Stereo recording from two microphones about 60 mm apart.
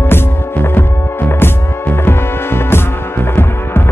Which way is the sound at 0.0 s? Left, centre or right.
Left.